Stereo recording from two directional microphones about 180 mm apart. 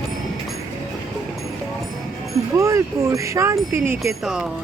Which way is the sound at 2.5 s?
15° right (ahead or behind).